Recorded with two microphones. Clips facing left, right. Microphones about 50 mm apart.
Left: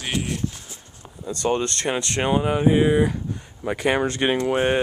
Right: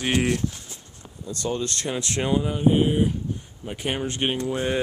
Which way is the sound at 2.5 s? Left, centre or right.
Left.